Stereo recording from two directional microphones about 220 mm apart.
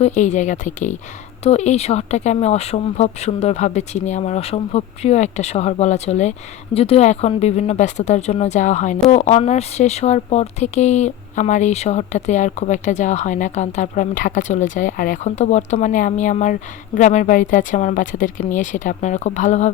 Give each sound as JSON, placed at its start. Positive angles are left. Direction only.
{"t": 0.0, "sound": "speech", "side_deg": 30}